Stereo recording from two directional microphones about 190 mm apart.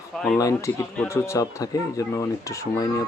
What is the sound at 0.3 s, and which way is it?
Speech, 15° left (ahead or behind).